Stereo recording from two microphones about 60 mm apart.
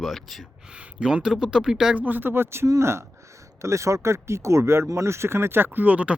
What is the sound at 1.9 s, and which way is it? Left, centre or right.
Speech, right.